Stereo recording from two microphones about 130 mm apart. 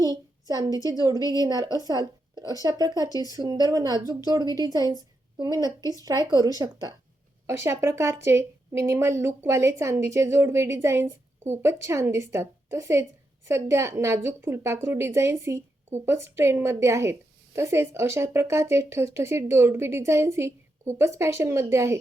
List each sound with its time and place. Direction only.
0.0 s a woman's voice: 30° right (ahead or behind)